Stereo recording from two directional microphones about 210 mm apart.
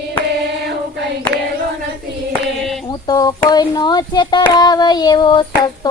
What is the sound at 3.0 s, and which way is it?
Child singing, 20° left (ahead or behind).